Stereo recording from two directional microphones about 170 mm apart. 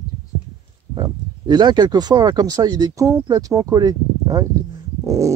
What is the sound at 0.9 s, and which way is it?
Speech, 25° right (ahead or behind).